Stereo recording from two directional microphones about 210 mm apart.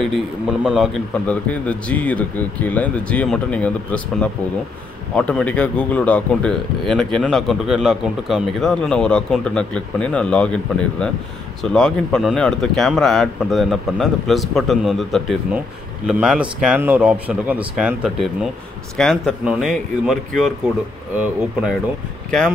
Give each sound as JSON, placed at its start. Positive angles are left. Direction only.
{"t": 0.0, "sound": "speech", "side_deg": 0}